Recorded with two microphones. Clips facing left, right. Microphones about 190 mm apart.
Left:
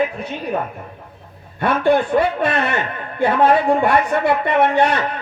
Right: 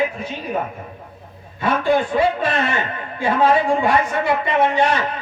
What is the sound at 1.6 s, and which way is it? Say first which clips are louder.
A woman's voice: left 2 dB; 60° left (ahead or behind).